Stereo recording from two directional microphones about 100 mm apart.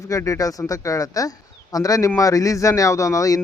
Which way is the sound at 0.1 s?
35° left (ahead or behind).